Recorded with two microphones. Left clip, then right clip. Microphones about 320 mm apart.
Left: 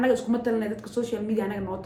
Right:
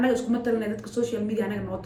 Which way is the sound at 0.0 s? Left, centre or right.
Centre.